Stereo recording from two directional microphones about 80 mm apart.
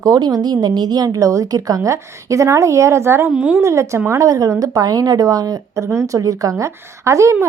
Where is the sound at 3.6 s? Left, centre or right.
Right.